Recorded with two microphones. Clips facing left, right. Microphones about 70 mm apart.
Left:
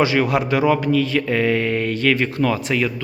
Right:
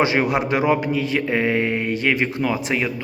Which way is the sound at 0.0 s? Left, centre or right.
Right.